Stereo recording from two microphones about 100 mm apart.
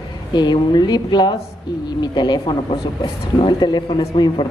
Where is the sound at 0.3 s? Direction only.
45° left (ahead or behind).